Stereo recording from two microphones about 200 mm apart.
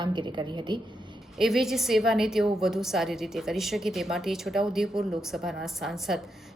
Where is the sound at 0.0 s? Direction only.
25° right (ahead or behind).